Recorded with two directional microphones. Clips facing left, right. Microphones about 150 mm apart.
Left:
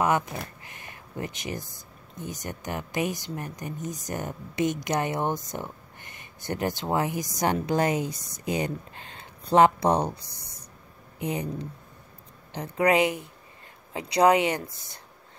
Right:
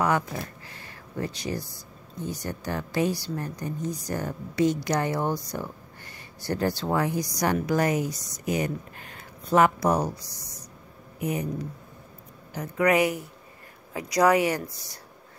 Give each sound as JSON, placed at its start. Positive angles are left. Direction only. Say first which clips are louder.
{"t": 0.0, "sound": "speech", "louder": "even", "side_deg": 20}
{"t": 10.2, "sound": "speech", "louder": "right 3 dB", "side_deg": 55}
{"t": 11.1, "sound": "speech", "louder": "right 1 dB", "side_deg": 25}